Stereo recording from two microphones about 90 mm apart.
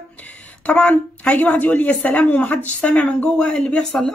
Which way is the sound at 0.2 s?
15° left (ahead or behind).